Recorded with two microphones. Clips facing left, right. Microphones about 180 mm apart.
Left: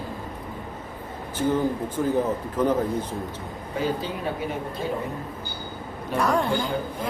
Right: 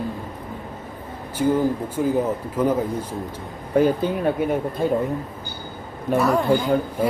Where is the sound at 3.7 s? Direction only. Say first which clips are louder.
Right 9 dB; 55° right (ahead or behind).